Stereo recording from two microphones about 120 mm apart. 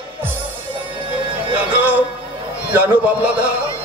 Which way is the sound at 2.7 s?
15° right (ahead or behind).